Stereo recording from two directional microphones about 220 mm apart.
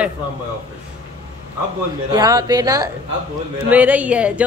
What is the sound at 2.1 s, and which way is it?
A woman's voice, 15° right (ahead or behind).